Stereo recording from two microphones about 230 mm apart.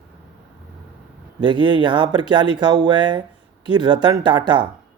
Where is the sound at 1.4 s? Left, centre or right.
Centre.